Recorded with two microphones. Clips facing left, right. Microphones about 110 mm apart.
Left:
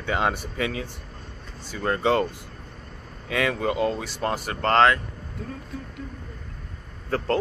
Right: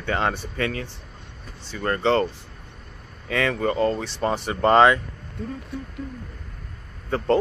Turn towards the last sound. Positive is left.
turn(degrees=0)  # may be behind; listen again after turning